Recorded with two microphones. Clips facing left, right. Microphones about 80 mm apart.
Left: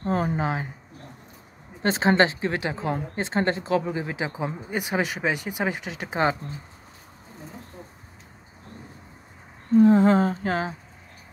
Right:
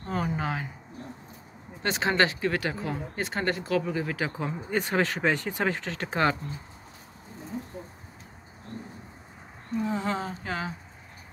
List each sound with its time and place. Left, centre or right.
0.0 s speech: left
0.4 s speech: left
1.8 s speech: left
9.8 s humming: left